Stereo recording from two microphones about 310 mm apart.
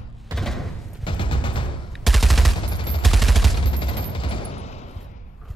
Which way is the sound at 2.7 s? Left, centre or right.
Centre.